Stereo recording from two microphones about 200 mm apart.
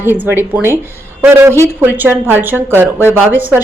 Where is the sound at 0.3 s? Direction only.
10° right (ahead or behind).